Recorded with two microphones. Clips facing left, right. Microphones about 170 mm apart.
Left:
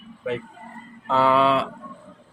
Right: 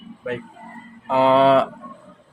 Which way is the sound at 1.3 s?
35° right (ahead or behind).